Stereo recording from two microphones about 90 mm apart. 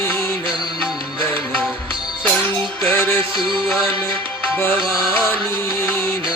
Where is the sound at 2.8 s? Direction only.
20° left (ahead or behind).